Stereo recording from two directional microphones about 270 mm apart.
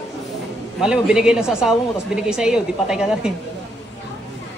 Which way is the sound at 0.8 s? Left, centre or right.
Centre.